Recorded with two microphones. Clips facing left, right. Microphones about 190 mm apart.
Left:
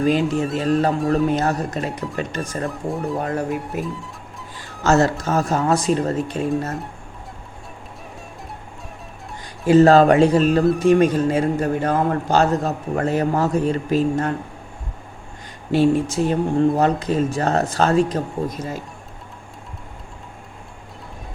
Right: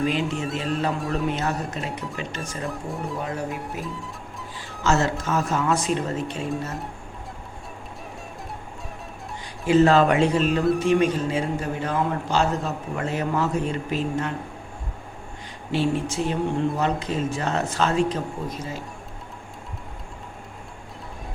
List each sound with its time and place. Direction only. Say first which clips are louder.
0.3 s speech: left 6 dB; centre (ahead or behind)
0.6 s speech: left 7 dB; 40° left (ahead or behind)
0.9 s speech: left 7 dB; centre (ahead or behind)
1.3 s speech: left 6 dB; 40° left (ahead or behind)
2.6 s speech: left 4 dB; centre (ahead or behind)
3.2 s speech: left 6 dB; 50° left (ahead or behind)
3.5 s speech: left 6 dB; centre (ahead or behind)
4.8 s speech: left 5 dB; 40° left (ahead or behind)
9.6 s speech: left 5 dB; 40° left (ahead or behind)
15.7 s speech: left 7 dB; 40° left (ahead or behind)